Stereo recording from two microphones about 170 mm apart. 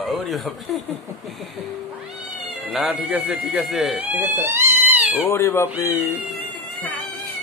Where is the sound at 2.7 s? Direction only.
Centre (ahead or behind).